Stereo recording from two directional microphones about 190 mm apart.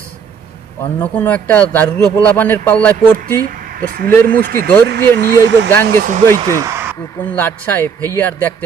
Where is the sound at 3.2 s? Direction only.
50° right (ahead or behind).